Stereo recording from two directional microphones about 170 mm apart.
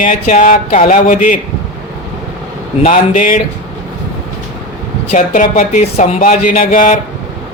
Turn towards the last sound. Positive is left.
turn(degrees=55)  # may be behind; listen again after turning